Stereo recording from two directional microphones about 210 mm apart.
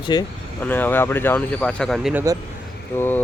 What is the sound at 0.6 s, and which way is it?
Speech, 10° left (ahead or behind).